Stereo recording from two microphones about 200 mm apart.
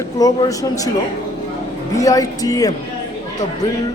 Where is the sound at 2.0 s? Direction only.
15° left (ahead or behind).